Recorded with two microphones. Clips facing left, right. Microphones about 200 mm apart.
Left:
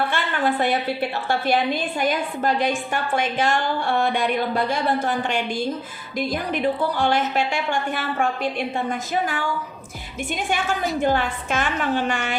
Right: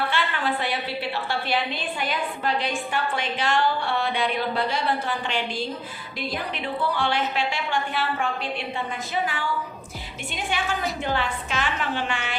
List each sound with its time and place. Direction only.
0.1 s a woman's voice: 50° left (ahead or behind)